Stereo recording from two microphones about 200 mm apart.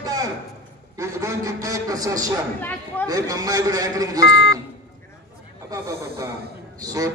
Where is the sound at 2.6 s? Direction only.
10° left (ahead or behind).